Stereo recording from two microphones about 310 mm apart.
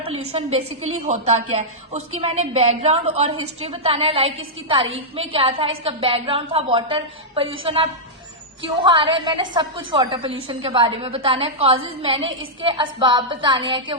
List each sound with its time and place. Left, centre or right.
0.3 s a woman's voice: centre